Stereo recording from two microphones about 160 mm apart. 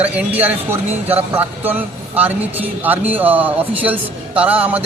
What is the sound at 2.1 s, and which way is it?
A man's voice, 10° right (ahead or behind).